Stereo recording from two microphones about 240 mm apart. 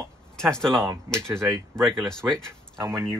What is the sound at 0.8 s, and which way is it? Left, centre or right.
Speech, centre.